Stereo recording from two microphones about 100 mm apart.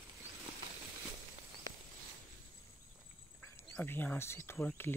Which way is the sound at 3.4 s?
25° left (ahead or behind).